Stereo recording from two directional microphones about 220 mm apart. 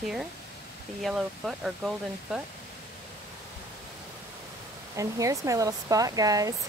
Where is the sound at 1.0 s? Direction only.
Centre (ahead or behind).